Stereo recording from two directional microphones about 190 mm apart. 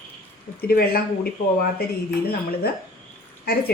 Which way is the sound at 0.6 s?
55° left (ahead or behind).